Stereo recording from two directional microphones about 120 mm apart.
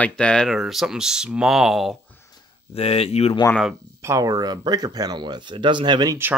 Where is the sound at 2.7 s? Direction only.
55° left (ahead or behind).